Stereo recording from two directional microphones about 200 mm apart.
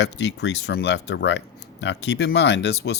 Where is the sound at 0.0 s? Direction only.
60° left (ahead or behind).